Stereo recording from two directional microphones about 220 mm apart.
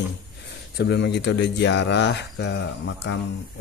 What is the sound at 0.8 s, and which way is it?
Speech, 50° left (ahead or behind).